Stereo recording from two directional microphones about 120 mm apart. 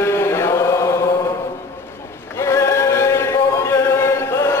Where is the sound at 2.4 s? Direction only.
25° left (ahead or behind).